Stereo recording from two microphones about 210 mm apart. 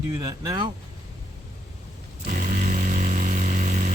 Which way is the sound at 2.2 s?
40° right (ahead or behind).